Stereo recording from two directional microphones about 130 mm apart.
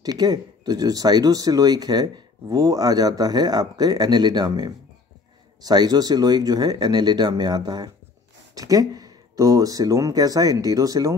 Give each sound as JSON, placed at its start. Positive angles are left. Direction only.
{"t": 0.0, "sound": "speech", "side_deg": -30}